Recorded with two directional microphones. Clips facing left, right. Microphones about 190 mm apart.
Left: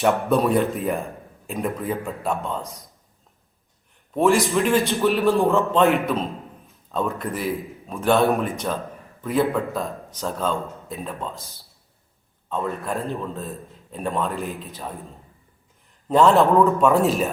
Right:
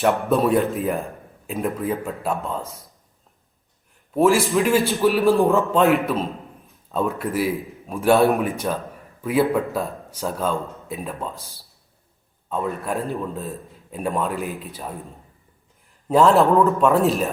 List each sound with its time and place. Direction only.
0.0 s a man's voice: centre (ahead or behind)
4.1 s a man's voice: 5° right (ahead or behind)
12.5 s a man's voice: centre (ahead or behind)
16.0 s a man's voice: centre (ahead or behind)